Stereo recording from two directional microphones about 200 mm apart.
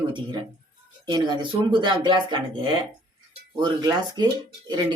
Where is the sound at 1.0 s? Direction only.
20° right (ahead or behind).